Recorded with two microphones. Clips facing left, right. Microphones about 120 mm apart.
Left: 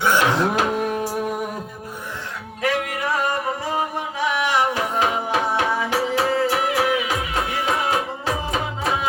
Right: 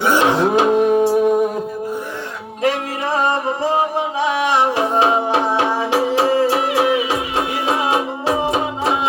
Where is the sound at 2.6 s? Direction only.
25° right (ahead or behind).